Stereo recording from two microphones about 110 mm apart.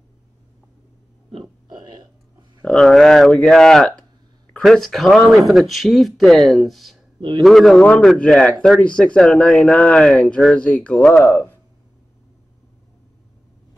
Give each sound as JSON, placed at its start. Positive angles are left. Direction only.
{"t": 2.6, "sound": "speech", "side_deg": 5}
{"t": 7.2, "sound": "a man's voice", "side_deg": -45}
{"t": 7.4, "sound": "speech", "side_deg": 0}